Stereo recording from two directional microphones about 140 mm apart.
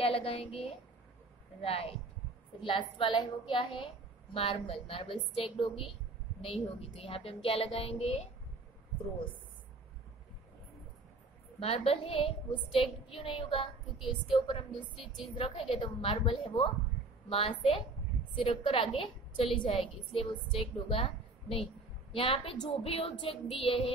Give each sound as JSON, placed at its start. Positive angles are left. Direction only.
{"t": 0.0, "sound": "a woman's voice", "side_deg": 40}
{"t": 11.6, "sound": "a woman's voice", "side_deg": 45}
{"t": 15.0, "sound": "speech", "side_deg": 0}
{"t": 15.3, "sound": "a woman's voice", "side_deg": 40}